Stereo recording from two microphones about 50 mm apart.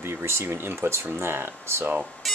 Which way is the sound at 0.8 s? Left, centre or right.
Right.